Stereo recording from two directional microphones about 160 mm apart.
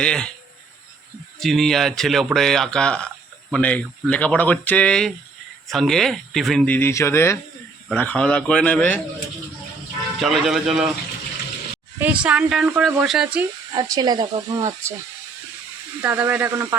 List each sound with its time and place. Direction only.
0.0 s speech: 5° left (ahead or behind)
1.4 s speech: centre (ahead or behind)
6.7 s speech: 15° left (ahead or behind)
10.2 s speech: centre (ahead or behind)
11.9 s speech: 10° right (ahead or behind)
13.7 s speech: 25° right (ahead or behind)
16.0 s speech: 10° right (ahead or behind)